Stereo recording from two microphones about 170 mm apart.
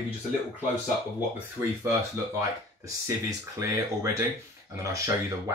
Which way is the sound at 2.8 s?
20° right (ahead or behind).